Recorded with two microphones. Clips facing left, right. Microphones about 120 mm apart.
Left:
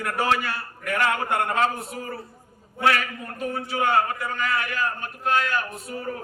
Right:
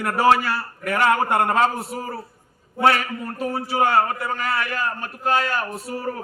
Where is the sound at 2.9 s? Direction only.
35° right (ahead or behind).